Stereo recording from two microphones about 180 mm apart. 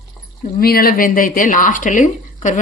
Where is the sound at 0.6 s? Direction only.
55° left (ahead or behind).